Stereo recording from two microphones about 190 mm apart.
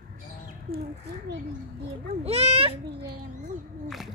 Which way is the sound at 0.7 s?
55° right (ahead or behind).